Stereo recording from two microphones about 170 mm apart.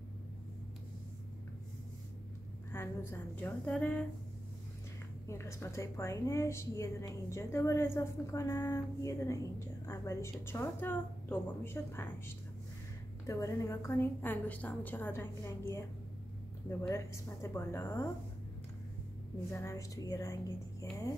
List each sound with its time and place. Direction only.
2.7 s a woman's voice: 15° left (ahead or behind)
5.2 s a woman's voice: 15° left (ahead or behind)
13.3 s a woman's voice: 20° left (ahead or behind)
16.8 s a woman's voice: 15° left (ahead or behind)
19.5 s speech: 15° left (ahead or behind)